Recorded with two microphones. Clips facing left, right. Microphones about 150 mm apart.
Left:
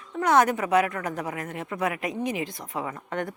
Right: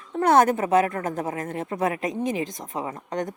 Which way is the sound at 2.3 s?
45° right (ahead or behind).